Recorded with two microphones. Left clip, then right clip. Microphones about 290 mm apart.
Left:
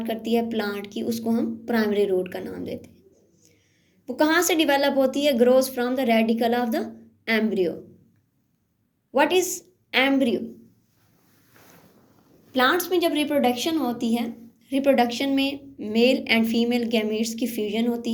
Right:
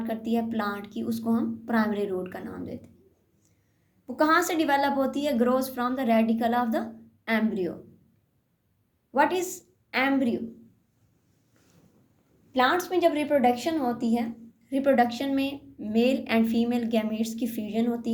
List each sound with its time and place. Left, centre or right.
0.0 s a woman's voice: right
4.0 s a woman's voice: right
9.1 s a woman's voice: right
12.5 s a woman's voice: centre